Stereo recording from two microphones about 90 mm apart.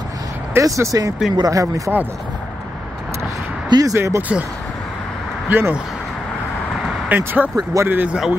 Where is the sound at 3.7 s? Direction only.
40° right (ahead or behind).